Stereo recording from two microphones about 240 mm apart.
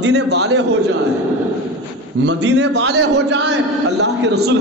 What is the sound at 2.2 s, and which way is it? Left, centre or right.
A man's voice, right.